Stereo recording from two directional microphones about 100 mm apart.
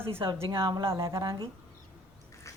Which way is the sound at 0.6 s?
45° right (ahead or behind).